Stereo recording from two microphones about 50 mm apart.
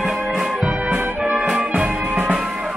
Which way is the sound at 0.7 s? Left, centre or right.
Right.